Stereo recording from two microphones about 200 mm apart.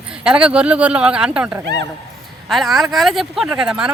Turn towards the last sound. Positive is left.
turn(degrees=-5)  # may be behind; listen again after turning